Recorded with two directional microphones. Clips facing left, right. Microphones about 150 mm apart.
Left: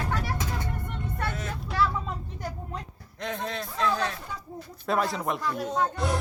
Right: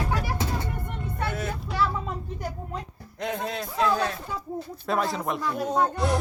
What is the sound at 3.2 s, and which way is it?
A child's voice, 10° right (ahead or behind).